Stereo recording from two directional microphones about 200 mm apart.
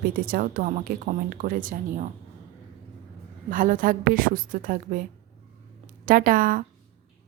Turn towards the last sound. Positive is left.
turn(degrees=-45)  # may be behind; listen again after turning